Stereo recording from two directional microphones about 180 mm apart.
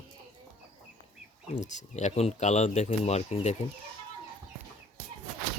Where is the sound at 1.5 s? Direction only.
40° left (ahead or behind).